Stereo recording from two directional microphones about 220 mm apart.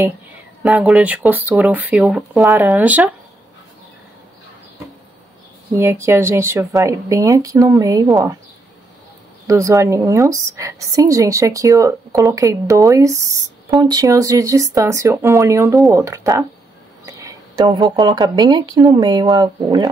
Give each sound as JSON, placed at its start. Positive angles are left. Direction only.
{"t": 0.7, "sound": "a woman's voice", "side_deg": -5}
{"t": 5.8, "sound": "a woman's voice", "side_deg": -10}
{"t": 9.5, "sound": "a woman's voice", "side_deg": -15}